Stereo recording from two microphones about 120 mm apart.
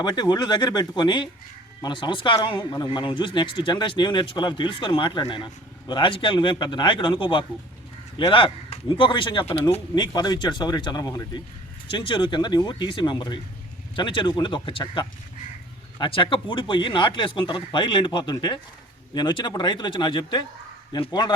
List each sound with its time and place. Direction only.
0.0 s a man's voice: 35° left (ahead or behind)
9.9 s a man's voice: 35° left (ahead or behind)
11.9 s a man's voice: 40° left (ahead or behind)